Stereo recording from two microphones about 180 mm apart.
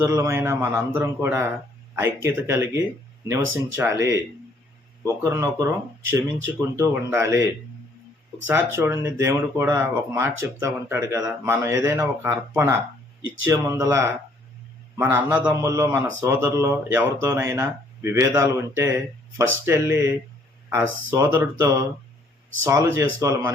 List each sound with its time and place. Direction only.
0.0 s speech: 15° right (ahead or behind)
6.7 s speech: 15° right (ahead or behind)